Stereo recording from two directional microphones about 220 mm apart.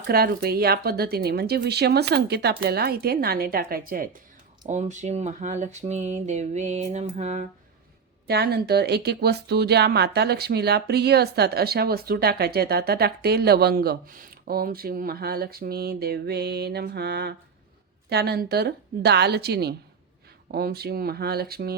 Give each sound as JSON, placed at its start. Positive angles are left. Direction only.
{"t": 0.1, "sound": "speech", "side_deg": -45}
{"t": 8.3, "sound": "speech", "side_deg": -45}